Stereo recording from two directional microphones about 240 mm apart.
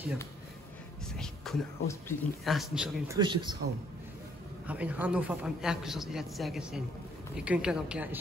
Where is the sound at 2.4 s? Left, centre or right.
Centre.